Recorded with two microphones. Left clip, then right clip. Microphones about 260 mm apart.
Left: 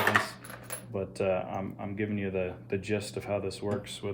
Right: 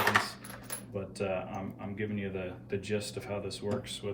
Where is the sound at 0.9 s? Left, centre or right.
Left.